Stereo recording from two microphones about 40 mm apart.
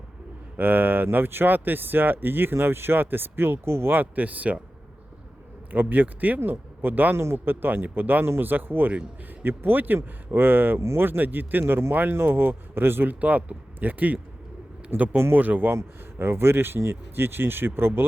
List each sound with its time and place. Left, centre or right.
0.5 s speech: right
3.9 s speech: right
5.7 s speech: right
7.2 s speech: right
11.2 s speech: right
13.1 s speech: right
15.7 s speech: right